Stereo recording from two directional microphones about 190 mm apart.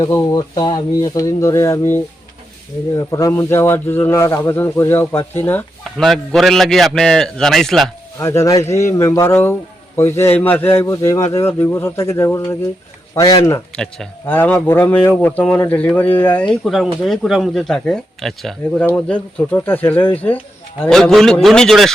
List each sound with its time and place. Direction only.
0.0 s speech: 15° left (ahead or behind)
6.0 s a man's voice: centre (ahead or behind)
8.2 s speech: 15° left (ahead or behind)
13.7 s a man's voice: 5° left (ahead or behind)